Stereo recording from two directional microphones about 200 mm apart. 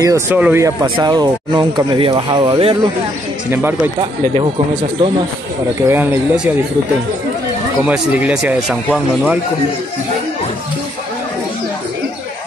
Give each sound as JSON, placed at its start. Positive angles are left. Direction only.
{"t": 0.0, "sound": "speech", "side_deg": -10}
{"t": 0.8, "sound": "speech", "side_deg": -25}
{"t": 3.4, "sound": "speech", "side_deg": -10}
{"t": 5.9, "sound": "speech", "side_deg": -5}
{"t": 7.8, "sound": "speech", "side_deg": -5}